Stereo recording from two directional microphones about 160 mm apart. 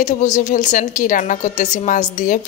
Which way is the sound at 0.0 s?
50° left (ahead or behind).